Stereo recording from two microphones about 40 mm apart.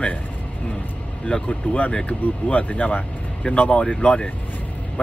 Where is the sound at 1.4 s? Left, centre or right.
Left.